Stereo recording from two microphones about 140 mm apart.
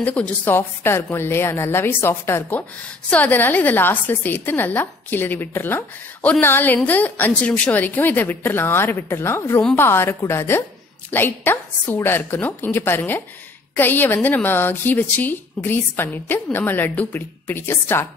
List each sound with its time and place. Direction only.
0.0 s a woman's voice: 10° left (ahead or behind)